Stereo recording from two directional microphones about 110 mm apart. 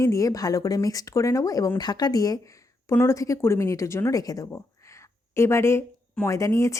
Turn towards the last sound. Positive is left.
turn(degrees=30)  # may be behind; listen again after turning